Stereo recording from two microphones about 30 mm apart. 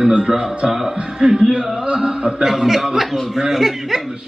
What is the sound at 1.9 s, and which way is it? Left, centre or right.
Speech, right.